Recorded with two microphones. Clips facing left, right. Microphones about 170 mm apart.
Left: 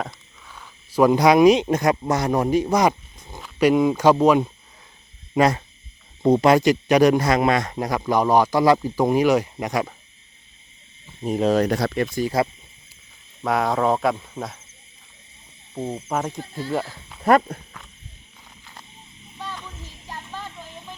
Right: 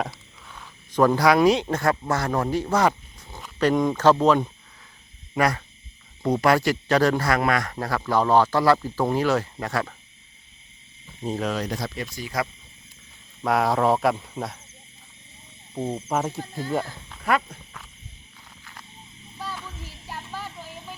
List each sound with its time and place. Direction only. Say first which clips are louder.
0.0 s speech: right 1 dB; centre (ahead or behind)
5.3 s speech: left 4 dB; 20° left (ahead or behind)
11.2 s speech: left 4 dB; 10° left (ahead or behind)
11.5 s speech: left 9 dB; 65° left (ahead or behind)
13.4 s speech: even; centre (ahead or behind)
15.7 s speech: even; 5° right (ahead or behind)
16.4 s speech: left 1 dB; 45° right (ahead or behind)
17.3 s speech: left 7 dB; 40° left (ahead or behind)
18.6 s a sound: left 1 dB; 20° left (ahead or behind)
19.4 s a sound: even; 5° right (ahead or behind)